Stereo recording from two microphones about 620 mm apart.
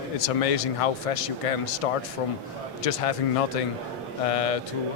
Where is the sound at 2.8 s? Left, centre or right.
Left.